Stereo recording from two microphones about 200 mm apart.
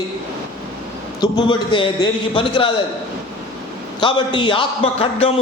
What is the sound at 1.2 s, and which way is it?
A man's voice, 25° left (ahead or behind).